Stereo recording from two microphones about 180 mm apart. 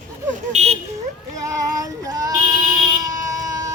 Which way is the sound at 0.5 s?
35° right (ahead or behind).